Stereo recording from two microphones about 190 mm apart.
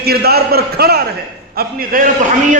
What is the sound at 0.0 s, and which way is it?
A man's voice, 55° right (ahead or behind).